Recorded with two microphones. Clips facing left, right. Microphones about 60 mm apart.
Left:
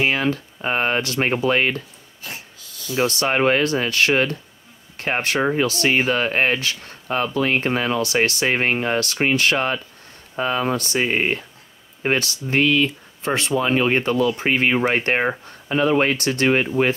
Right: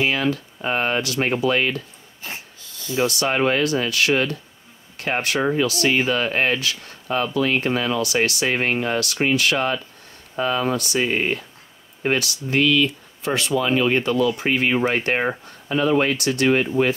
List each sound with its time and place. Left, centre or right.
0.0 s speech: left
2.2 s dog: right
3.0 s speech: left
14.8 s speech: left
15.7 s speech: left